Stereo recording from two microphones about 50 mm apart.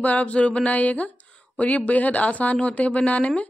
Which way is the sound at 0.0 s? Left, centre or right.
Left.